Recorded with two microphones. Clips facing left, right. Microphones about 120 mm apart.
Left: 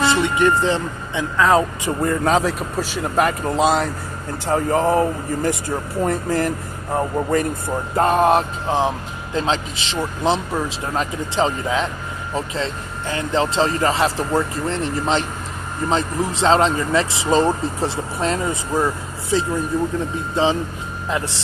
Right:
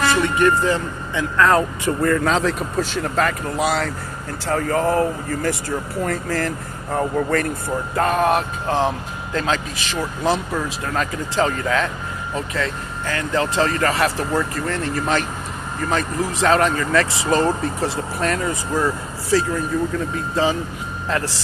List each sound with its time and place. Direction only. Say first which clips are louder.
0.0 s speech: even; 20° left (ahead or behind)
7.9 s speech: left 3 dB; 25° left (ahead or behind)
8.6 s speech: even; 15° left (ahead or behind)